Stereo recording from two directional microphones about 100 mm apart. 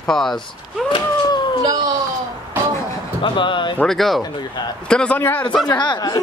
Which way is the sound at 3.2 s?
55° left (ahead or behind).